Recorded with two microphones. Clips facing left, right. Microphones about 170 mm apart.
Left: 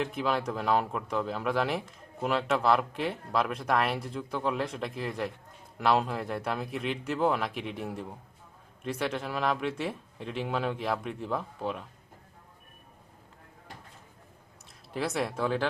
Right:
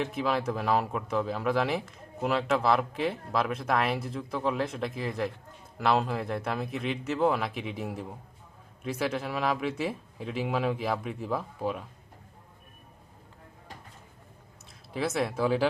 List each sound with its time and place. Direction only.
0.0 s speech: centre (ahead or behind)
14.9 s speech: centre (ahead or behind)